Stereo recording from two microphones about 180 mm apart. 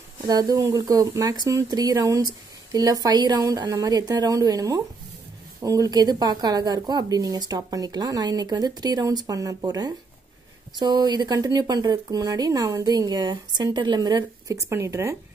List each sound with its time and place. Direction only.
0.3 s speech: 20° right (ahead or behind)